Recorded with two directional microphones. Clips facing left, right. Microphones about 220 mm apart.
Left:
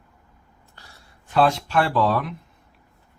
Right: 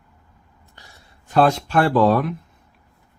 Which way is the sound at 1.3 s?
45° right (ahead or behind).